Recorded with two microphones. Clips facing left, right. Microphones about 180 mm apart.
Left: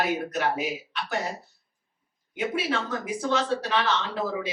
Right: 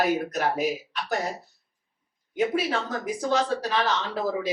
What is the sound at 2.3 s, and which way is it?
Speech, 35° right (ahead or behind).